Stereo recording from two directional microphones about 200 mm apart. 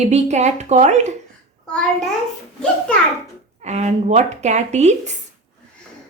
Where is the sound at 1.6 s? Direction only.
5° left (ahead or behind).